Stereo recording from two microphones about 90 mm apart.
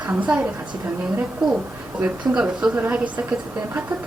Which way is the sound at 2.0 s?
10° right (ahead or behind).